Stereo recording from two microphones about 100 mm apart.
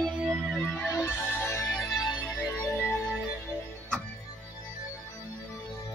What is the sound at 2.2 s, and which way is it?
Music, 20° left (ahead or behind).